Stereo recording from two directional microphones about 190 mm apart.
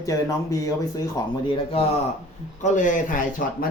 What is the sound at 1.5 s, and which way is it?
Speech, 30° left (ahead or behind).